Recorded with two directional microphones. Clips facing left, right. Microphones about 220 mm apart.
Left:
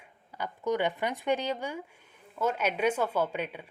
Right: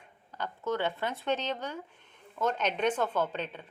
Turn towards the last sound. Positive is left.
turn(degrees=10)  # may be behind; listen again after turning